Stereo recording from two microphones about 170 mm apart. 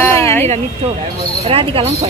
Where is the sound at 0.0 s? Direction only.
15° left (ahead or behind).